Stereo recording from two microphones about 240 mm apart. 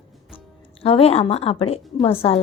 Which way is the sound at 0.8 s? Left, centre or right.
Left.